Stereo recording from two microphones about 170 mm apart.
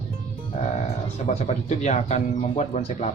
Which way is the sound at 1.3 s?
40° left (ahead or behind).